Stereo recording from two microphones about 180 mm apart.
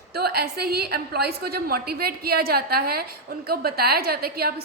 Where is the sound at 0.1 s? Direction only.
60° right (ahead or behind).